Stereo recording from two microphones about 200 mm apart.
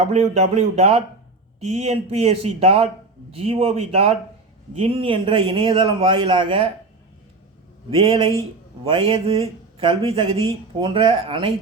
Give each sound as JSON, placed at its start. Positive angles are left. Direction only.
{"t": 0.0, "sound": "a man's voice", "side_deg": -30}
{"t": 7.9, "sound": "a man's voice", "side_deg": -25}
{"t": 10.4, "sound": "a man's voice", "side_deg": -25}